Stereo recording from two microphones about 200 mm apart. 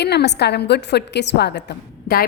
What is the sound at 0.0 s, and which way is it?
A woman's voice, 55° left (ahead or behind).